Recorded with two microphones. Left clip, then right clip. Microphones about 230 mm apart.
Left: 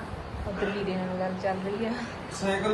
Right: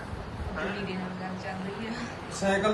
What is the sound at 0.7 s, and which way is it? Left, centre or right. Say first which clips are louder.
Speech: left 4 dB; centre.